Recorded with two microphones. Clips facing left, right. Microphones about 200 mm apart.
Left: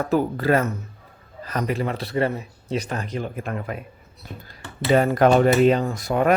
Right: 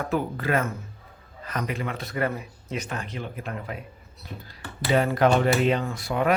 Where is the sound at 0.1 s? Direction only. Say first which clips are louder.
Left 6 dB; 35° left (ahead or behind).